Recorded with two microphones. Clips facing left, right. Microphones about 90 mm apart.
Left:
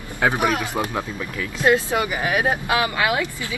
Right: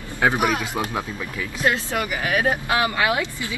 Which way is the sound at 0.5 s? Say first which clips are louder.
Left 1 dB; 15° left (ahead or behind).